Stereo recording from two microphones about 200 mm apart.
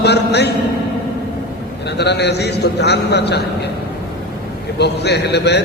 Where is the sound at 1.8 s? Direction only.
55° left (ahead or behind).